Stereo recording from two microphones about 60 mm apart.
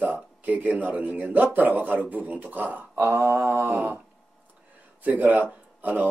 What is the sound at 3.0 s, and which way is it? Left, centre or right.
Mantra, right.